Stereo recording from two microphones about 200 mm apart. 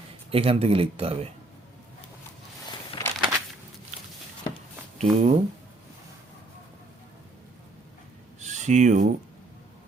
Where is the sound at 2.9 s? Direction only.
25° left (ahead or behind).